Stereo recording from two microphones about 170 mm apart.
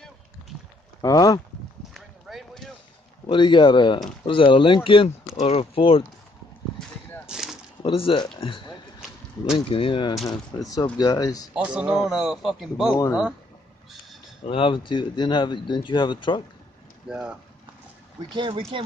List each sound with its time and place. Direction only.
1.0 s speech: 20° left (ahead or behind)
2.0 s a sound: centre (ahead or behind)
3.3 s speech: 30° left (ahead or behind)
7.2 s a sound: 5° right (ahead or behind)
7.8 s speech: 30° left (ahead or behind)
11.5 s a man's voice: 5° right (ahead or behind)
14.4 s speech: 30° left (ahead or behind)
17.1 s a man's voice: 5° right (ahead or behind)
18.3 s speech: 30° right (ahead or behind)